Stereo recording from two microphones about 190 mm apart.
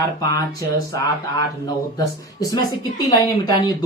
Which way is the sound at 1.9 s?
20° left (ahead or behind).